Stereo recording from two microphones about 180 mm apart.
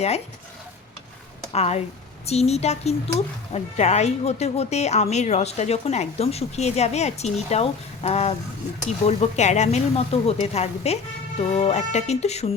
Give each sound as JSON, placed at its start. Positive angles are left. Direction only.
{"t": 1.5, "sound": "speech", "side_deg": 35}